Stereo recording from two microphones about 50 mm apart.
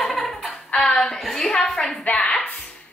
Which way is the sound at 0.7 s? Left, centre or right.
Centre.